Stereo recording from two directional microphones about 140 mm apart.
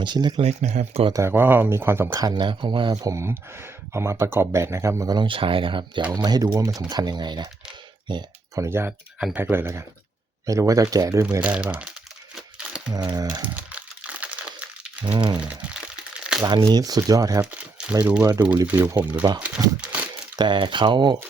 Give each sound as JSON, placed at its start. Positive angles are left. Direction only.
{"t": 0.0, "sound": "speech", "side_deg": -35}
{"t": 0.4, "sound": "speech", "side_deg": -55}
{"t": 1.1, "sound": "speech", "side_deg": -15}
{"t": 2.1, "sound": "speech", "side_deg": -30}
{"t": 8.0, "sound": "a sound", "side_deg": -35}
{"t": 8.6, "sound": "speech", "side_deg": -15}
{"t": 11.4, "sound": "speech", "side_deg": -10}
{"t": 13.1, "sound": "speech", "side_deg": -30}
{"t": 13.4, "sound": "crumpling", "side_deg": -10}
{"t": 15.0, "sound": "speech", "side_deg": -35}
{"t": 15.4, "sound": "crumpling", "side_deg": -5}
{"t": 16.4, "sound": "speech", "side_deg": -30}
{"t": 17.4, "sound": "speech", "side_deg": -5}
{"t": 19.6, "sound": "speech", "side_deg": -25}